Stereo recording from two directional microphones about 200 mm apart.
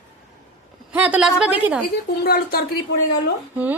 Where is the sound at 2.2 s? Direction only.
50° left (ahead or behind).